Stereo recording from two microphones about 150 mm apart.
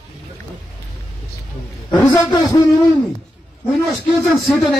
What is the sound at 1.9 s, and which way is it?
Speech, 25° left (ahead or behind).